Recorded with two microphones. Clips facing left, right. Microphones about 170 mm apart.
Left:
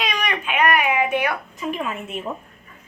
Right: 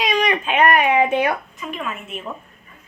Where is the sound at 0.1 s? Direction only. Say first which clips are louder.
Right 5 dB; 25° right (ahead or behind).